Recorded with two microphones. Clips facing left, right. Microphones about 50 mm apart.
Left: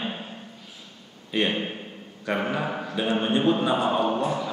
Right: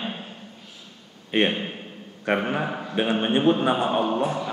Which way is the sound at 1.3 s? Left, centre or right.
Right.